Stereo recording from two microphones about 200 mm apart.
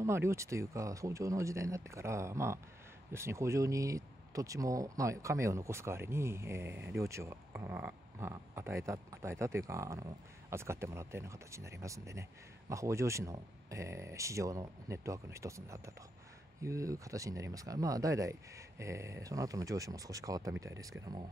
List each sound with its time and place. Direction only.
0.0 s speech: 15° right (ahead or behind)